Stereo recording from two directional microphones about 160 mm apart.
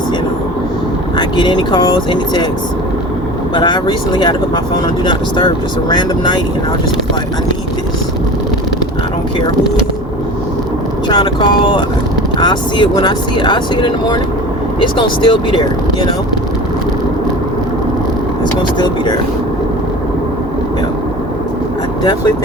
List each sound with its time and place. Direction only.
1.1 s speech: 30° left (ahead or behind)
3.5 s speech: 30° left (ahead or behind)
5.9 s speech: 25° left (ahead or behind)
11.1 s speech: 25° left (ahead or behind)